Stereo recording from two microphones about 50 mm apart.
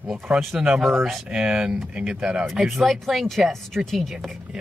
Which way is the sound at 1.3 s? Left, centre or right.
Centre.